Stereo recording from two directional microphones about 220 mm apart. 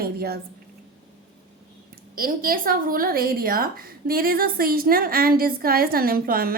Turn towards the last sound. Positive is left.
turn(degrees=-40)  # may be behind; listen again after turning